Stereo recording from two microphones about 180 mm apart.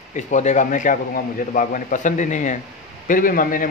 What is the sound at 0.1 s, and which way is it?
Speech, 40° left (ahead or behind).